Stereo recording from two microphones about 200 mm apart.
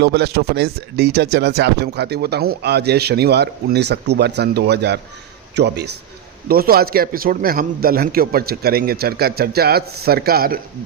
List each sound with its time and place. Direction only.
0.0 s a man's voice: 55° right (ahead or behind)